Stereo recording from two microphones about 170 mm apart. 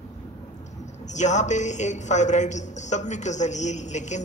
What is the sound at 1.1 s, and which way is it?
A man's voice, 45° left (ahead or behind).